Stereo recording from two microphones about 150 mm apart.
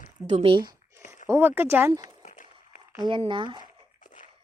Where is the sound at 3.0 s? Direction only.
35° right (ahead or behind).